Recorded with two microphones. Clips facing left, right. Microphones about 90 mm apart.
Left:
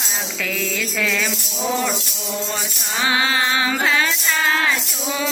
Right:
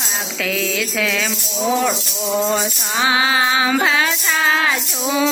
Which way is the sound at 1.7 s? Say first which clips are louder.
Right 4 dB; 10° right (ahead or behind).